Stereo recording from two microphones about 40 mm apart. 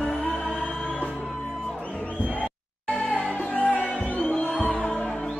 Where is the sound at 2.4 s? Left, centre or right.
Left.